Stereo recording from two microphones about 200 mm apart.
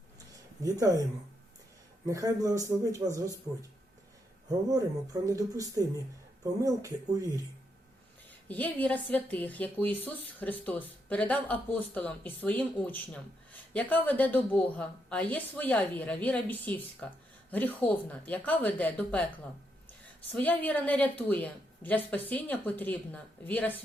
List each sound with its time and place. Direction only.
0.6 s a man's voice: 15° right (ahead or behind)
2.0 s a man's voice: 15° right (ahead or behind)
5.2 s a man's voice: 15° right (ahead or behind)
8.4 s speech: 10° left (ahead or behind)